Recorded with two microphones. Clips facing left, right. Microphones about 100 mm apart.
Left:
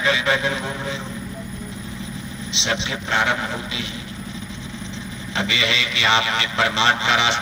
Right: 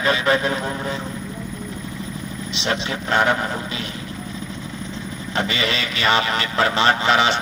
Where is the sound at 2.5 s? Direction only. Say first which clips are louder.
Right 1 dB; 45° right (ahead or behind).